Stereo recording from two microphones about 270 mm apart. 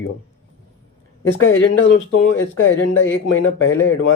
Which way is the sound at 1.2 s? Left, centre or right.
Left.